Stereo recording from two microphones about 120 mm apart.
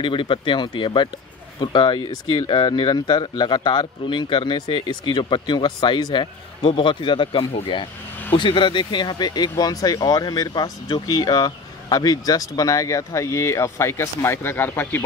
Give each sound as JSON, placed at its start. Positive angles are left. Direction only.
{"t": 0.0, "sound": "speech", "side_deg": 45}